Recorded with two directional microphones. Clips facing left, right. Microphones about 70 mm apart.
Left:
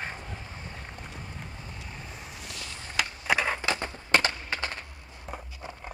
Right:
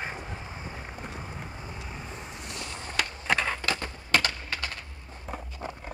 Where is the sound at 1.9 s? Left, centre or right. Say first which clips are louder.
Right 3 dB; centre.